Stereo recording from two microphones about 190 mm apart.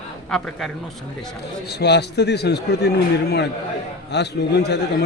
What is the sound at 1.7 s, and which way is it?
A man's voice, 60° left (ahead or behind).